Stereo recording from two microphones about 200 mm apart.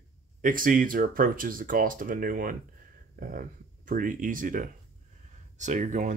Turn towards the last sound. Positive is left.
turn(degrees=-35)  # may be behind; listen again after turning